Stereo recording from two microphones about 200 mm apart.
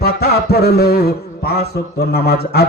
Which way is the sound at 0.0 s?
50° left (ahead or behind).